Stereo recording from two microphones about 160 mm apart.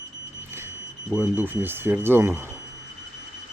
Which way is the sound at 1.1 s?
10° right (ahead or behind).